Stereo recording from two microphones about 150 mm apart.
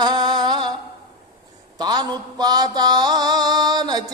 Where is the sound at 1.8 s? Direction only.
25° right (ahead or behind).